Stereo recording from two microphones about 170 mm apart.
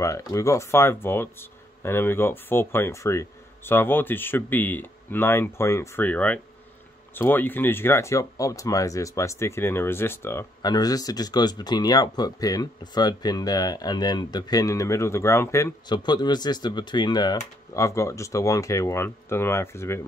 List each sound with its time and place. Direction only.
0.0 s speech: 20° left (ahead or behind)